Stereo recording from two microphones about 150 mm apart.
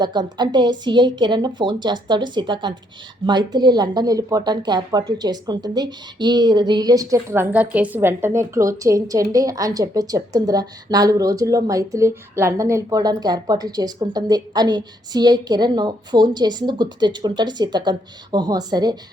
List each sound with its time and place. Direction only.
0.0 s speech: 30° right (ahead or behind)